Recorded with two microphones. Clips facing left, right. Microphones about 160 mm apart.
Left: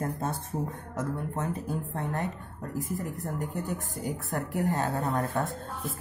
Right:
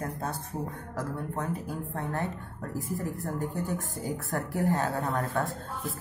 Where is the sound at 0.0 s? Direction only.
25° left (ahead or behind).